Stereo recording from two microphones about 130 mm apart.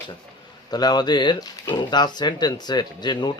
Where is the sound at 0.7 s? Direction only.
30° left (ahead or behind).